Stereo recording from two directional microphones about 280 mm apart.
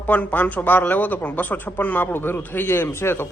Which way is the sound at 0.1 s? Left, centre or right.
Centre.